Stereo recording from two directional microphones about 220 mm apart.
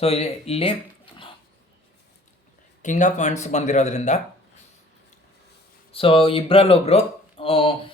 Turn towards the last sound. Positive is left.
turn(degrees=25)  # may be behind; listen again after turning